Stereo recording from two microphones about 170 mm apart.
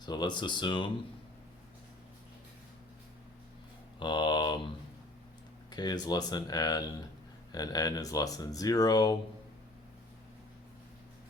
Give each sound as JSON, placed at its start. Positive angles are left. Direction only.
{"t": 0.0, "sound": "speech", "side_deg": 25}
{"t": 4.0, "sound": "speech", "side_deg": 25}
{"t": 5.7, "sound": "speech", "side_deg": 25}